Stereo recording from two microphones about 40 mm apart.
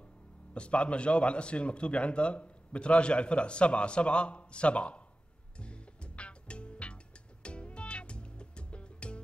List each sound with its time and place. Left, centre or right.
0.6 s a man's voice: left
5.6 s music: left